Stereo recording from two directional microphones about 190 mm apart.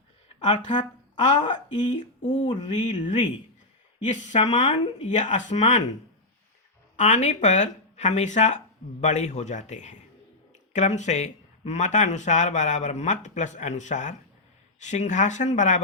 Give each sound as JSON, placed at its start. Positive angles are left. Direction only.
{"t": 0.4, "sound": "speech", "side_deg": 40}
{"t": 2.5, "sound": "mantra", "side_deg": 25}
{"t": 2.9, "sound": "speech", "side_deg": 40}
{"t": 6.9, "sound": "speech", "side_deg": 40}